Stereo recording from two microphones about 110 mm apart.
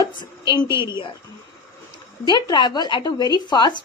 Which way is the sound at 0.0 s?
45° left (ahead or behind).